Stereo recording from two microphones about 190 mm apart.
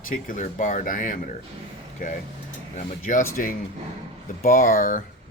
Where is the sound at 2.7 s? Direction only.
45° left (ahead or behind).